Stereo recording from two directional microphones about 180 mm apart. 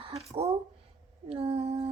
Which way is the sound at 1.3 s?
30° right (ahead or behind).